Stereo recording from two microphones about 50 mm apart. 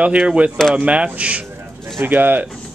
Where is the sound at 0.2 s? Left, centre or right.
Centre.